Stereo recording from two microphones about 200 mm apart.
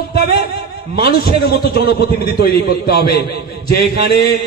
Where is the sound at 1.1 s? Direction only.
50° left (ahead or behind).